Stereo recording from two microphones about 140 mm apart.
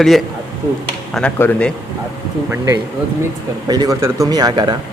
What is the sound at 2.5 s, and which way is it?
A man's voice, 20° right (ahead or behind).